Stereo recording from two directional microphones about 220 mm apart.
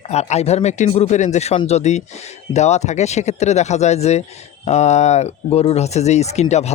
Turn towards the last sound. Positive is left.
turn(degrees=30)  # may be behind; listen again after turning